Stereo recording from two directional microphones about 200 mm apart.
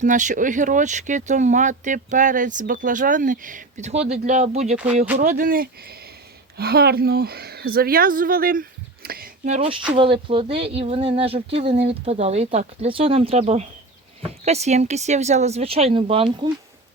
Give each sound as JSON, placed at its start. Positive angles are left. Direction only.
{"t": 0.0, "sound": "speech", "side_deg": -40}
{"t": 9.0, "sound": "a sound", "side_deg": -45}
{"t": 9.9, "sound": "speech", "side_deg": -25}